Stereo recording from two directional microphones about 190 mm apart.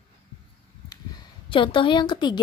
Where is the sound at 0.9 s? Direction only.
20° left (ahead or behind).